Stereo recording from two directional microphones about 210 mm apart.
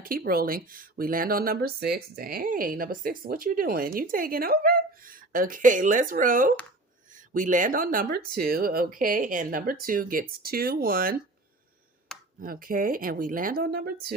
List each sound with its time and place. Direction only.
0.0 s speech: 45° right (ahead or behind)
12.4 s speech: 40° right (ahead or behind)